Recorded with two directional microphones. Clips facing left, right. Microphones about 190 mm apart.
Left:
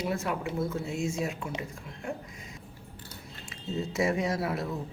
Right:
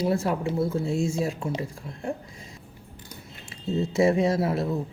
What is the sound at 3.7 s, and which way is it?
Speech, 25° right (ahead or behind).